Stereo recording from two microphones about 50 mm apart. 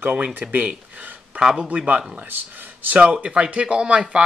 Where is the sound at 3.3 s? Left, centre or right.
Right.